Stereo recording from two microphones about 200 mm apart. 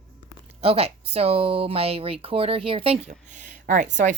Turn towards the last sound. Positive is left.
turn(degrees=-40)  # may be behind; listen again after turning